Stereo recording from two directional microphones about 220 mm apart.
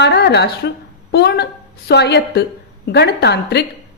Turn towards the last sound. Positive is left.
turn(degrees=50)  # may be behind; listen again after turning